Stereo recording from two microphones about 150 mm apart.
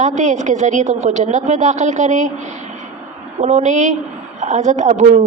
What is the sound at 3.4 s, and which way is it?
A woman's voice, 50° right (ahead or behind).